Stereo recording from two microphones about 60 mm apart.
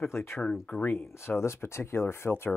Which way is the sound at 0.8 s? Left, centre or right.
Left.